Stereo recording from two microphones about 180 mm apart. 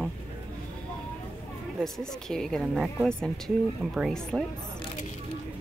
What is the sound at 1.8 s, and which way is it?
Speech, 5° left (ahead or behind).